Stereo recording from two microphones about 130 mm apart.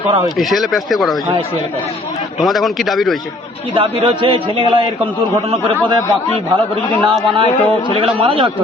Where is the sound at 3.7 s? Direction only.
45° right (ahead or behind).